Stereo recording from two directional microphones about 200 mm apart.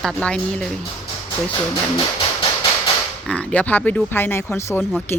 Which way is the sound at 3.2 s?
5° left (ahead or behind).